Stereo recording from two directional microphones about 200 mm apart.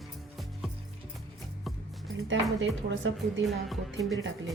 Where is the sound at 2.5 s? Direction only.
70° right (ahead or behind).